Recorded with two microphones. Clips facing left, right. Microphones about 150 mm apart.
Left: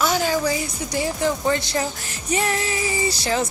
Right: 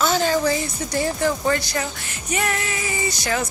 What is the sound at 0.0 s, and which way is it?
Speech, 10° left (ahead or behind).